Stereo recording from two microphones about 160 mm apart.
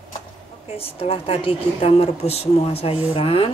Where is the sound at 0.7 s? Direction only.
40° left (ahead or behind).